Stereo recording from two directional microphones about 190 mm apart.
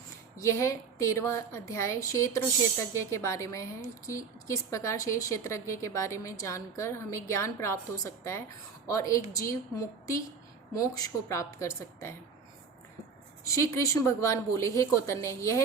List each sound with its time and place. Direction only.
0.3 s a woman's voice: 15° left (ahead or behind)
13.4 s a woman's voice: 15° left (ahead or behind)